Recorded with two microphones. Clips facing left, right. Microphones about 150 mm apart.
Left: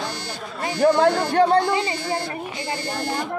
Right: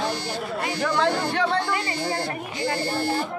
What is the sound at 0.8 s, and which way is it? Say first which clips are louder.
Speech: left 7 dB; 45° left (ahead or behind).